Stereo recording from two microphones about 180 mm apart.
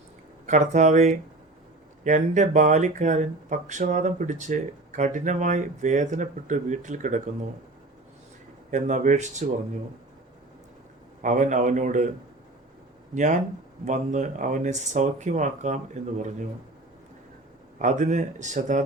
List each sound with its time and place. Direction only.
0.4 s speech: 45° right (ahead or behind)
8.7 s speech: 45° right (ahead or behind)
11.2 s speech: 45° right (ahead or behind)
13.8 s speech: 45° right (ahead or behind)
17.7 s speech: 45° right (ahead or behind)